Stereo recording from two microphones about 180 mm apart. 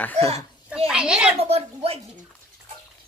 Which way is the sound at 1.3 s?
35° right (ahead or behind).